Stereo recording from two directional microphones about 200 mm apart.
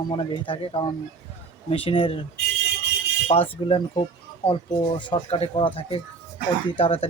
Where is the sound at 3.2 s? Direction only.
30° left (ahead or behind).